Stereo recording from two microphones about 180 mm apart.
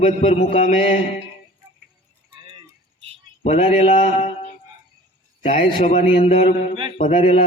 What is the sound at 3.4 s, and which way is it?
A man's voice, 40° left (ahead or behind).